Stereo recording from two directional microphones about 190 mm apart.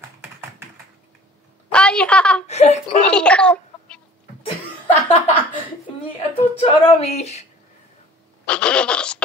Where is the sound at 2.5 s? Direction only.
35° left (ahead or behind).